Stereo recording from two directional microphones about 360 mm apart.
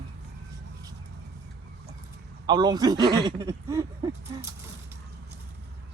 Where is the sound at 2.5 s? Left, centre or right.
Centre.